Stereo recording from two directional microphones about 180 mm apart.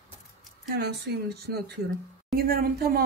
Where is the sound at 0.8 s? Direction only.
65° right (ahead or behind).